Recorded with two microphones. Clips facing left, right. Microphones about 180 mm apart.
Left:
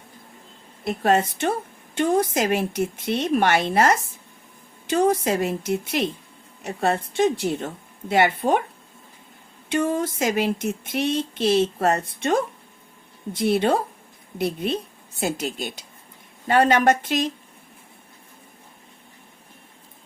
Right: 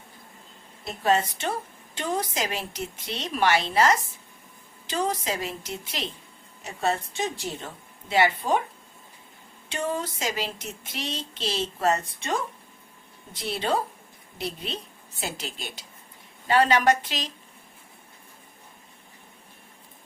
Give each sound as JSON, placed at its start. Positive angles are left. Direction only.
{"t": 0.9, "sound": "a woman's voice", "side_deg": 55}
{"t": 9.7, "sound": "a woman's voice", "side_deg": 50}